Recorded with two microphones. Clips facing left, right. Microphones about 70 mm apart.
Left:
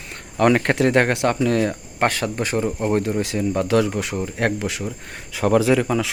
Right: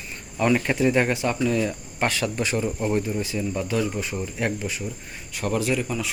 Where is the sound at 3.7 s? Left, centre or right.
Left.